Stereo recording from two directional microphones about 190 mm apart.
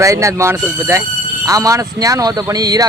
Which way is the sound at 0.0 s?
15° right (ahead or behind).